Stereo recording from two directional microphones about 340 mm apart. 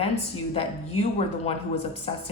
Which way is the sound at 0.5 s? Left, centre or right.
Centre.